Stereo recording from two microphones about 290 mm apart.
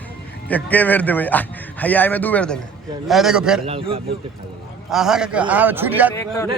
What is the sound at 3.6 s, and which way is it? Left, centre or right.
Speech, centre.